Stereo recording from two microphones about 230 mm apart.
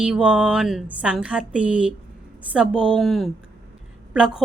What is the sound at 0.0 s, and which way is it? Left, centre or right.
A woman's voice, centre.